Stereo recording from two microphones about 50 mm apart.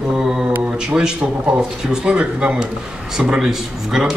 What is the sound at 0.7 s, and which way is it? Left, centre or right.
A man's voice, centre.